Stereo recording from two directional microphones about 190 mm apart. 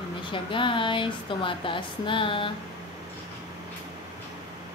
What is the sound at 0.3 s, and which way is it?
A woman's voice, 25° left (ahead or behind).